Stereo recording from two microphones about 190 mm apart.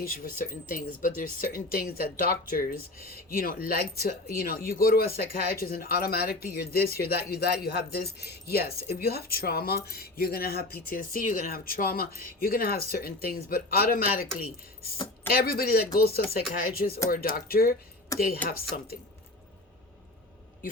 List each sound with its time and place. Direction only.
0.0 s speech: 50° left (ahead or behind)
15.3 s speech: 55° left (ahead or behind)